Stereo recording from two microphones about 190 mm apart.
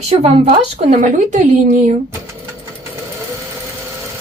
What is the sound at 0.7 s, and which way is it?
A woman's voice, 40° right (ahead or behind).